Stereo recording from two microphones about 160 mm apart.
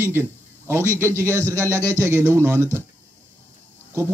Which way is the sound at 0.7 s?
15° right (ahead or behind).